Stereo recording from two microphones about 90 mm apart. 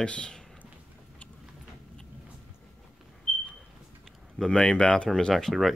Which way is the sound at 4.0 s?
5° left (ahead or behind).